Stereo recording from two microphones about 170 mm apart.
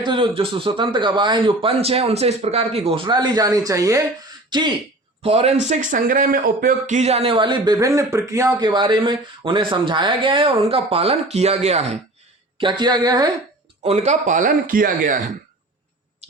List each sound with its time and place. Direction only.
0.0 s a man's voice: 30° right (ahead or behind)
5.2 s a man's voice: 35° right (ahead or behind)
13.8 s speech: 40° right (ahead or behind)